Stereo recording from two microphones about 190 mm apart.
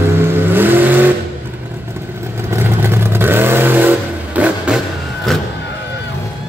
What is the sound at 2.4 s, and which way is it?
Vehicle, 10° right (ahead or behind).